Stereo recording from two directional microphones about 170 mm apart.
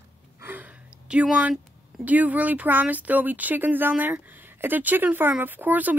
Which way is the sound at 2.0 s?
10° right (ahead or behind).